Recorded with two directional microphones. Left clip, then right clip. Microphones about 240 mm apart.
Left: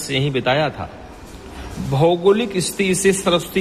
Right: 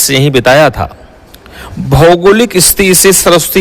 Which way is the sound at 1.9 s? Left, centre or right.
Right.